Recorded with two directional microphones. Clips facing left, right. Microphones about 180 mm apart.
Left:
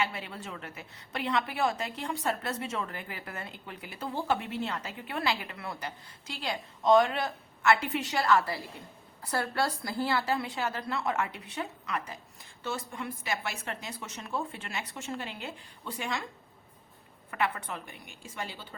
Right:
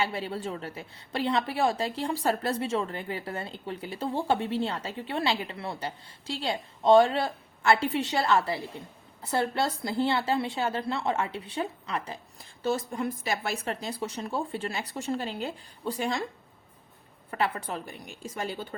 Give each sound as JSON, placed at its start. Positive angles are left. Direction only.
{"t": 0.0, "sound": "a woman's voice", "side_deg": -30}
{"t": 17.3, "sound": "a woman's voice", "side_deg": -35}